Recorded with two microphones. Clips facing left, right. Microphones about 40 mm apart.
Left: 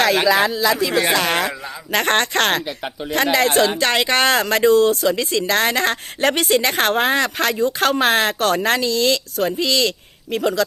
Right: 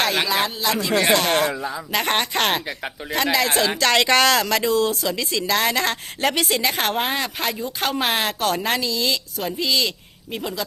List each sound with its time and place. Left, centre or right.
0.1 s speech: centre
1.9 s speech: left
3.9 s speech: centre
4.2 s speech: left
10.3 s speech: left